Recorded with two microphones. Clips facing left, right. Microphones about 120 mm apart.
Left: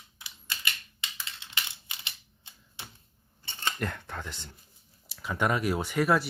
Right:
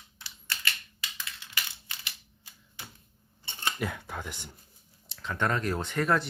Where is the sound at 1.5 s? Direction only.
25° left (ahead or behind).